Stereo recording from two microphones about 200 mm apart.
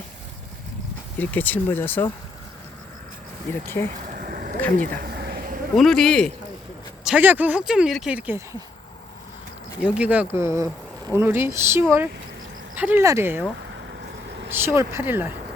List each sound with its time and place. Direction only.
1.2 s speech: 10° left (ahead or behind)
3.5 s speech: 10° left (ahead or behind)
4.1 s a sound: 45° right (ahead or behind)
4.8 s insect: 50° right (ahead or behind)
5.7 s speech: centre (ahead or behind)
9.8 s speech: 5° right (ahead or behind)
14.5 s speech: 10° right (ahead or behind)